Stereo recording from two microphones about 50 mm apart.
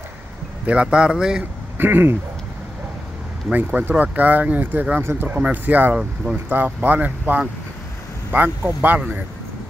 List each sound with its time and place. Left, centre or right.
0.7 s speech: right
1.8 s speech: right
3.5 s speech: right
5.0 s speech: right
5.4 s speech: right